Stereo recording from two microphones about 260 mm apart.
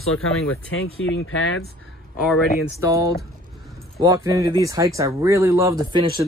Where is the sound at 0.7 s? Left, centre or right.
Left.